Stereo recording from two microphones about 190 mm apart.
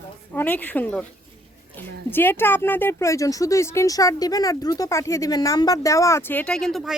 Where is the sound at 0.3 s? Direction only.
10° left (ahead or behind).